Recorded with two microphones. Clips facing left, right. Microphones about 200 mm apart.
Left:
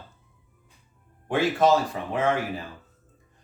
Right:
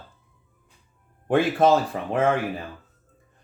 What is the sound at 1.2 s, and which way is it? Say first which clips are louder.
Speech: right 2 dB; 55° right (ahead or behind).